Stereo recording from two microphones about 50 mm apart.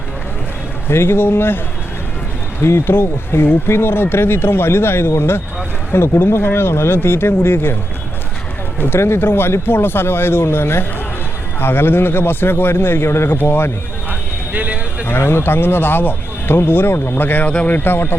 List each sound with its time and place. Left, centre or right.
0.9 s speech: left
2.6 s speech: left
8.8 s speech: left
14.1 s vehicle: right
15.0 s speech: left
17.4 s speech: left
17.7 s speech: left